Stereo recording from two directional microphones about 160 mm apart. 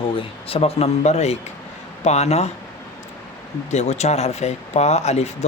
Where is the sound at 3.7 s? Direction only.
45° left (ahead or behind).